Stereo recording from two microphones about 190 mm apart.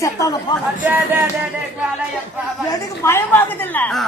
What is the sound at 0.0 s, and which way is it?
Speech, 15° left (ahead or behind).